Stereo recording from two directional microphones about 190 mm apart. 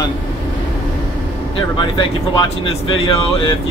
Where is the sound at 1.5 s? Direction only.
25° left (ahead or behind).